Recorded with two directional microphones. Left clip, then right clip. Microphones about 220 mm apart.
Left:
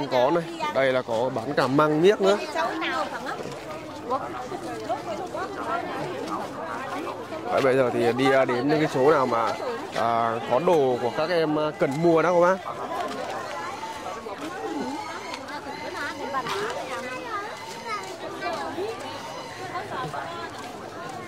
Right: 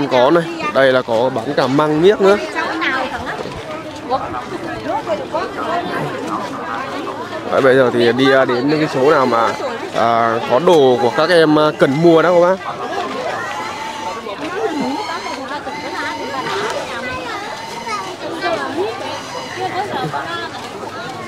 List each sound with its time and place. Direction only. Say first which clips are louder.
0.1 s speech: right 9 dB; 10° right (ahead or behind)
1.5 s speech: right 4 dB; 5° left (ahead or behind)
7.5 s speech: right 10 dB; 10° right (ahead or behind)
8.5 s speech: right 7 dB; centre (ahead or behind)
9.2 s speech: right 9 dB; 10° right (ahead or behind)
12.1 s speech: right 8 dB; 5° right (ahead or behind)